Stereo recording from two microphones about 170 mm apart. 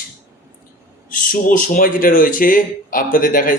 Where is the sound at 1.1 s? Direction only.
55° left (ahead or behind).